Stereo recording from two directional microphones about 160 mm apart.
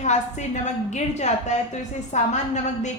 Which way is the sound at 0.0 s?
45° left (ahead or behind).